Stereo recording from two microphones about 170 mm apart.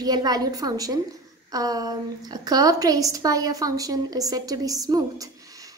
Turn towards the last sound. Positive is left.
turn(degrees=-20)  # may be behind; listen again after turning